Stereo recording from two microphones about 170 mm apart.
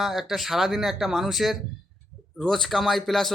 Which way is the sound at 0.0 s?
Centre (ahead or behind).